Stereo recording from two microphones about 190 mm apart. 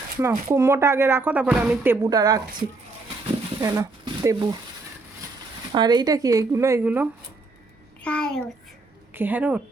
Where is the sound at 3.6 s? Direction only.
15° right (ahead or behind).